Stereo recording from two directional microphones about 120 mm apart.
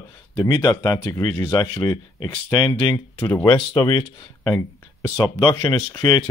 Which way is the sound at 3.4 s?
40° left (ahead or behind).